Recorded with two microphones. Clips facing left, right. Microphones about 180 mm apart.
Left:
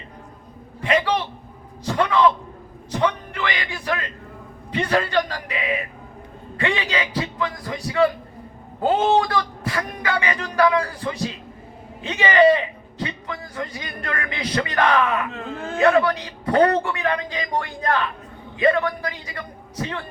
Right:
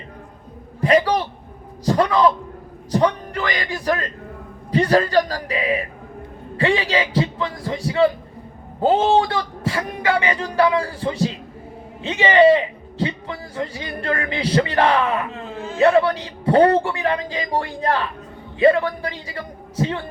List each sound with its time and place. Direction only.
0.8 s a man's voice: 40° right (ahead or behind)